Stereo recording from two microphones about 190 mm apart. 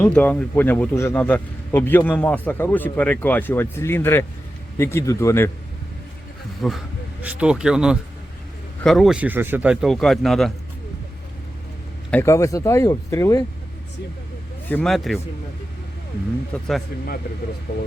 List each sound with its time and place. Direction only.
0.0 s a man's voice: 10° left (ahead or behind)
6.6 s speech: centre (ahead or behind)
12.1 s a man's voice: 15° left (ahead or behind)
14.7 s speech: 5° left (ahead or behind)
16.5 s speech: 5° left (ahead or behind)
17.7 s speech: 65° left (ahead or behind)